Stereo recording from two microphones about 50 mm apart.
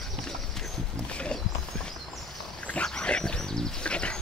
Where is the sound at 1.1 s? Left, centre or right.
Left.